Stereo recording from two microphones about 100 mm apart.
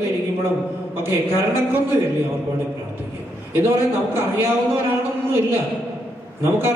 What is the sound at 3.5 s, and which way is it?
A woman's voice, 20° right (ahead or behind).